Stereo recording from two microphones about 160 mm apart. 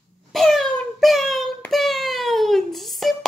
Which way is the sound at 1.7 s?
Centre (ahead or behind).